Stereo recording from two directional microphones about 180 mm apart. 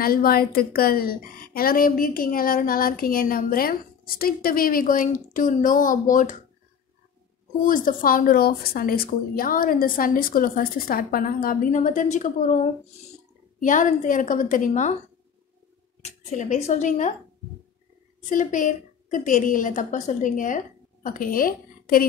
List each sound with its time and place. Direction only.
0.0 s speech: 55° left (ahead or behind)
7.6 s speech: 50° left (ahead or behind)
13.6 s speech: 45° left (ahead or behind)
16.0 s speech: 40° left (ahead or behind)
18.3 s a woman's voice: 45° left (ahead or behind)